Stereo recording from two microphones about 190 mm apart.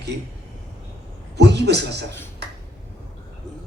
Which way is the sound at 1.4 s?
65° right (ahead or behind).